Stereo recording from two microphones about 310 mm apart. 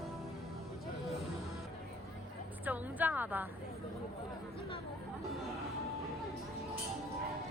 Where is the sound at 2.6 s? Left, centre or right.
Centre.